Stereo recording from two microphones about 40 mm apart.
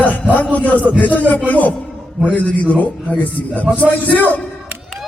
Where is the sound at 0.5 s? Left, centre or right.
Left.